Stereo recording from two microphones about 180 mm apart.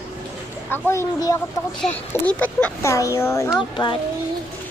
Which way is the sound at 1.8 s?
5° left (ahead or behind).